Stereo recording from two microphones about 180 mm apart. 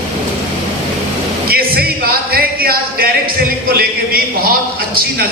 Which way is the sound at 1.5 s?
55° right (ahead or behind).